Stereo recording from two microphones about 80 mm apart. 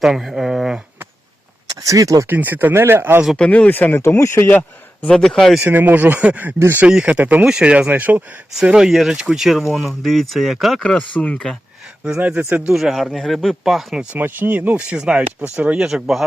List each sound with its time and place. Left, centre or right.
0.0 s speech: centre
1.6 s speech: right
2.2 s speech: right
3.3 s speech: centre
4.0 s speech: left
5.0 s speech: centre
5.6 s speech: right
6.6 s speech: right
6.8 s speech: centre
10.8 s speech: centre
12.2 s speech: centre
12.7 s speech: centre
14.2 s speech: right
15.9 s speech: centre